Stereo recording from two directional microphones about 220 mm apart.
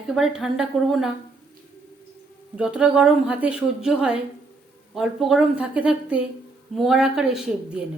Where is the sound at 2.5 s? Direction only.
5° right (ahead or behind).